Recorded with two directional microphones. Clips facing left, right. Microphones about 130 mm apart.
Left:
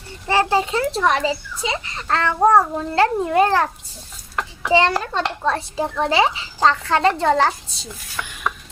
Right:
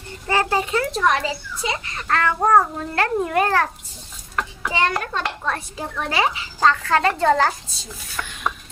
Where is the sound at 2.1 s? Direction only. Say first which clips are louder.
Left 2 dB; 25° left (ahead or behind).